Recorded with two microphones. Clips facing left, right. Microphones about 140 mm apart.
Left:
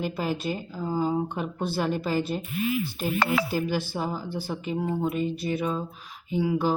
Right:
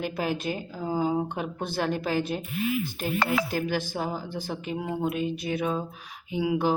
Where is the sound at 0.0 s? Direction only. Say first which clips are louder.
Even; 50° right (ahead or behind).